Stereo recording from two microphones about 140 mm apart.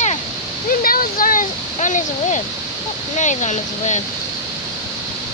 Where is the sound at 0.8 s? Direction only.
90° left.